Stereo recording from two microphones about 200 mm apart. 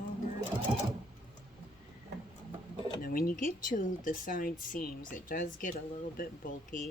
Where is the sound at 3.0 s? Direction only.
45° left (ahead or behind).